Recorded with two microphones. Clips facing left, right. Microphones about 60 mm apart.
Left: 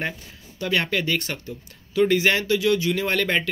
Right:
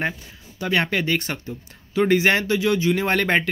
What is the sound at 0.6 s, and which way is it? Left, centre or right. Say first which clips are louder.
A man's voice: right 2 dB; right.